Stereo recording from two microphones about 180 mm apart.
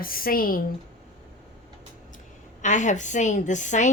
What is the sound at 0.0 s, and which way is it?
Speech, 55° left (ahead or behind).